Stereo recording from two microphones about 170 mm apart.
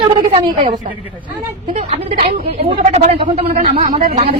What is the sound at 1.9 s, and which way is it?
Speech, 35° right (ahead or behind).